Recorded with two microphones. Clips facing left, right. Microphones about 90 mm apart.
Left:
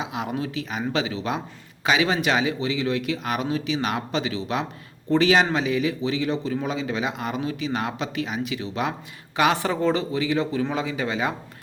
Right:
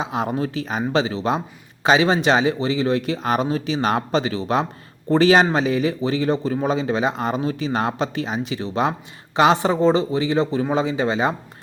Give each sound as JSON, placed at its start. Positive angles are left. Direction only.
{"t": 0.0, "sound": "speech", "side_deg": -35}